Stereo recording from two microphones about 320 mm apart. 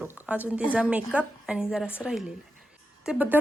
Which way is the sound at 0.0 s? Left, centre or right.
Centre.